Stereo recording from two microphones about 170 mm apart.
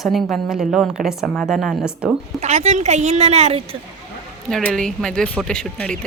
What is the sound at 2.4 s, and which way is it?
Speech, 40° right (ahead or behind).